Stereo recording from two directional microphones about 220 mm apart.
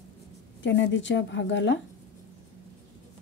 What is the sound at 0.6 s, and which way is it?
Speech, 55° left (ahead or behind).